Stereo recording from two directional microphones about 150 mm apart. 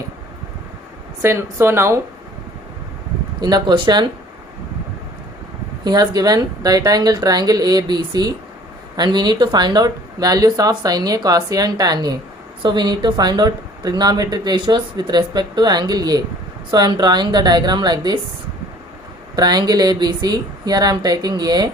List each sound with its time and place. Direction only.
1.2 s speech: 15° right (ahead or behind)
3.4 s speech: 30° right (ahead or behind)
5.8 s speech: 25° right (ahead or behind)
19.4 s speech: 25° right (ahead or behind)